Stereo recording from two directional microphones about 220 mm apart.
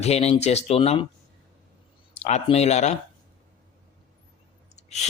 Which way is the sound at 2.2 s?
30° left (ahead or behind).